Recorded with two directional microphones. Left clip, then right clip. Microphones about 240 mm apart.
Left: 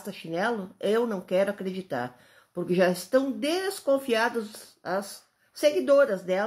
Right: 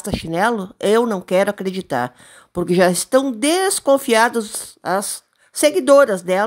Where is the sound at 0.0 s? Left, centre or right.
Right.